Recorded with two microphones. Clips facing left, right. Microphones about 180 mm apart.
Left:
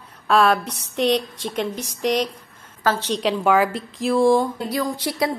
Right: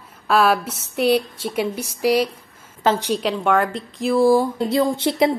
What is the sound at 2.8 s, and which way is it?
Speech, 20° right (ahead or behind).